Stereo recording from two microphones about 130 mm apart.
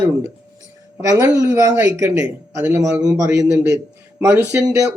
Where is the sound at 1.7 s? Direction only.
15° right (ahead or behind).